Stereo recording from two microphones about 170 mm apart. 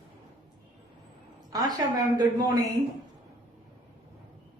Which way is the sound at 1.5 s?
25° right (ahead or behind).